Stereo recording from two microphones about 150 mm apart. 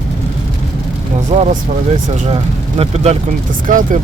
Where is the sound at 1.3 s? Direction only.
45° right (ahead or behind).